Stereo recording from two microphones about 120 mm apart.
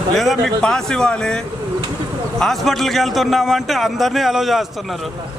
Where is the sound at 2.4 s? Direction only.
Centre (ahead or behind).